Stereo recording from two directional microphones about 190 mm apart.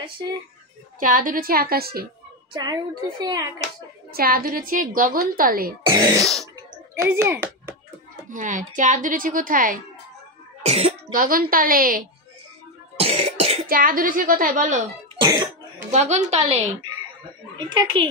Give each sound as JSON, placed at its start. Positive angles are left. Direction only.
{"t": 0.2, "sound": "a child's voice", "side_deg": -20}
{"t": 0.9, "sound": "a woman's voice", "side_deg": -45}
{"t": 2.5, "sound": "a child's voice", "side_deg": -20}
{"t": 4.1, "sound": "a woman's voice", "side_deg": -50}
{"t": 5.9, "sound": "a child's voice", "side_deg": -15}
{"t": 8.3, "sound": "a woman's voice", "side_deg": -40}
{"t": 10.6, "sound": "speech", "side_deg": -35}
{"t": 11.1, "sound": "a woman's voice", "side_deg": -50}
{"t": 12.9, "sound": "cough", "side_deg": -30}
{"t": 13.7, "sound": "a woman's voice", "side_deg": -50}
{"t": 15.1, "sound": "cough", "side_deg": -20}
{"t": 15.9, "sound": "a woman's voice", "side_deg": -40}
{"t": 17.6, "sound": "a child's voice", "side_deg": -25}